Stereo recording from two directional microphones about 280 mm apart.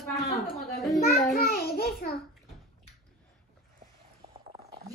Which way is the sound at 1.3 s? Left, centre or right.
Left.